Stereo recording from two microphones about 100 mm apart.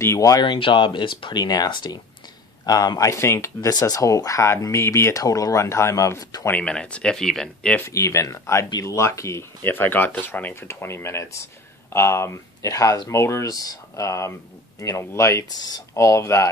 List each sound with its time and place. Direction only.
0.0 s speech: 30° left (ahead or behind)
0.4 s speech: 60° left (ahead or behind); by 3.7 s 30° left (ahead or behind)
3.7 s speech: 40° left (ahead or behind)
6.5 s speech: 10° left (ahead or behind)
7.8 s speech: 30° left (ahead or behind)